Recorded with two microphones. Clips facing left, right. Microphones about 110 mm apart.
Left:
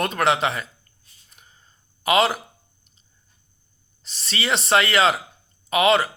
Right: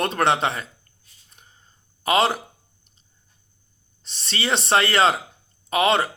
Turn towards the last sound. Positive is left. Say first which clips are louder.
# left 1 dB
turn(degrees=-30)  # may be behind; listen again after turning